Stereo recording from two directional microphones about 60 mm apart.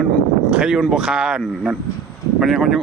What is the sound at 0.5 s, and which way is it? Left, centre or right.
Speech, centre.